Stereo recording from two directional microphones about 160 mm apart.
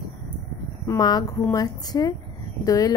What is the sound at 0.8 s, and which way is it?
A woman's voice, 25° left (ahead or behind).